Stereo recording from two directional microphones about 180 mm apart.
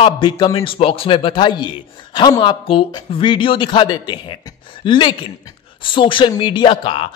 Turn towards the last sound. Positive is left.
turn(degrees=30)  # may be behind; listen again after turning